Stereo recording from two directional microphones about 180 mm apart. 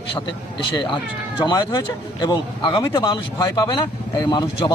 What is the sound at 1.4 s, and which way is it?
Speech, 20° left (ahead or behind).